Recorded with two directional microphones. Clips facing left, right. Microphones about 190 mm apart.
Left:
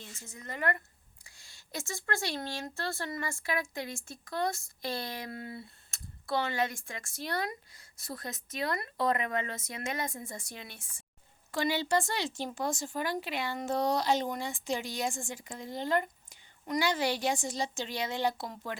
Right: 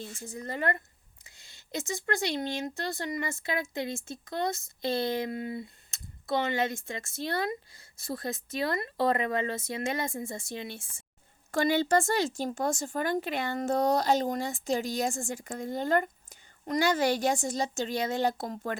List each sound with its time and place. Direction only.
0.3 s speech: 35° right (ahead or behind)
11.5 s speech: 50° right (ahead or behind)